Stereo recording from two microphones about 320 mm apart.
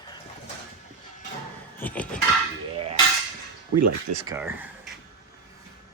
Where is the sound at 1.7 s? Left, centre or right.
Centre.